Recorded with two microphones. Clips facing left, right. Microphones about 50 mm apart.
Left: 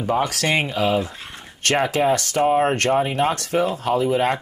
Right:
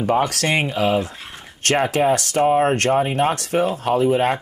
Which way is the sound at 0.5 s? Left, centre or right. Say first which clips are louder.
Left 1 dB; right.